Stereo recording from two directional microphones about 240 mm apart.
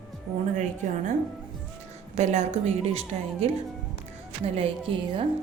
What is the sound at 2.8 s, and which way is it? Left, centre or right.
Speech, right.